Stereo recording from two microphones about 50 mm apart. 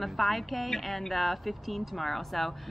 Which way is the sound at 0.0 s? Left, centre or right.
Centre.